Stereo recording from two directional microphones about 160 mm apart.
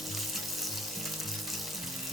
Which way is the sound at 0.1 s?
Centre (ahead or behind).